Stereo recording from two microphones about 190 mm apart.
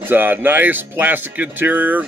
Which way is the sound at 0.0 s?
10° right (ahead or behind).